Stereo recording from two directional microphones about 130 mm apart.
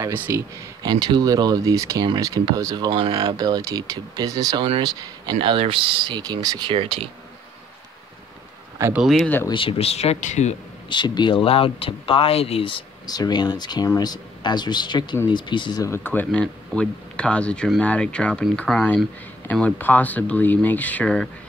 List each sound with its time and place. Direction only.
0.0 s speech: 20° right (ahead or behind)
0.8 s speech: 35° right (ahead or behind)
6.7 s speech: 45° right (ahead or behind)
8.9 s speech: centre (ahead or behind)
9.5 s speech: 40° left (ahead or behind); by 10.5 s 60° left (ahead or behind)
10.9 s speech: 35° left (ahead or behind)
15.8 s speech: 20° left (ahead or behind); by 19.0 s centre (ahead or behind)
19.5 s speech: 10° left (ahead or behind)